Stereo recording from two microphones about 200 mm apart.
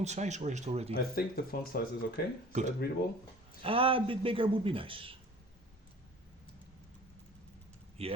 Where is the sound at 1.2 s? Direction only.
50° left (ahead or behind).